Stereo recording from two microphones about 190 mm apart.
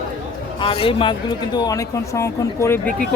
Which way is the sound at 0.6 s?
30° left (ahead or behind).